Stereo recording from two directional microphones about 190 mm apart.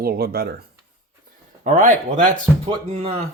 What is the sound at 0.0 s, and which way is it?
Speech, 55° right (ahead or behind).